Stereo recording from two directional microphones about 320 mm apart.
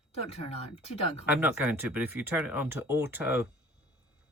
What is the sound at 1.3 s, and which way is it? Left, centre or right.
Speech, centre.